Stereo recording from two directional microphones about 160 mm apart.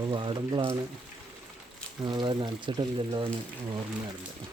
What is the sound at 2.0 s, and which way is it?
Speech, 30° right (ahead or behind).